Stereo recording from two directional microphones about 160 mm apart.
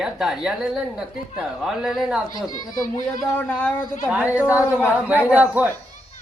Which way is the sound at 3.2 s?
10° left (ahead or behind).